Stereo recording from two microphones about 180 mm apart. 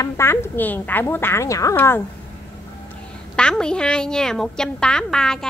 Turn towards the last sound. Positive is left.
turn(degrees=5)  # may be behind; listen again after turning